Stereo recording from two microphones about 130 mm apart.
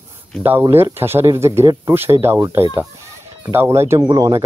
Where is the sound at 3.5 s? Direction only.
20° right (ahead or behind).